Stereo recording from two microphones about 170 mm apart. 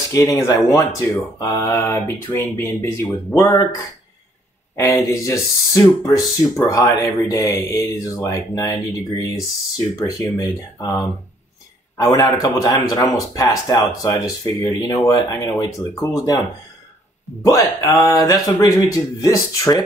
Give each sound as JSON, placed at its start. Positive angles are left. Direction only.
{"t": 0.1, "sound": "speech", "side_deg": 15}
{"t": 17.5, "sound": "speech", "side_deg": 20}